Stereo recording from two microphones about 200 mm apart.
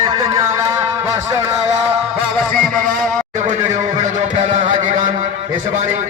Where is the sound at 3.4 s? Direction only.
40° right (ahead or behind).